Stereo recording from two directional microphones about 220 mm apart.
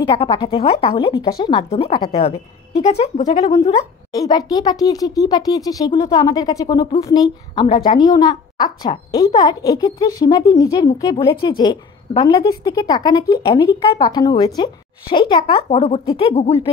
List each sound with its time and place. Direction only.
0.0 s a woman's voice: 20° left (ahead or behind)
4.1 s a woman's voice: 15° left (ahead or behind)